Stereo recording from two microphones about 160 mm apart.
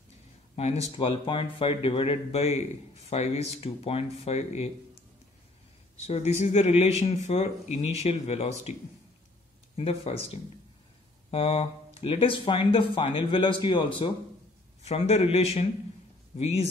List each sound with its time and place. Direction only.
0.6 s speech: 40° left (ahead or behind)
6.0 s speech: 40° left (ahead or behind)
9.8 s speech: 40° left (ahead or behind)